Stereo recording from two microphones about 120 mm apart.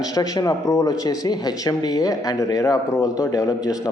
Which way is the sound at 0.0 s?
30° left (ahead or behind).